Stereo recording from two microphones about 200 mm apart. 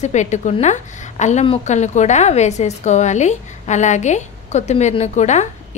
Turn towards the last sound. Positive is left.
turn(degrees=35)  # may be behind; listen again after turning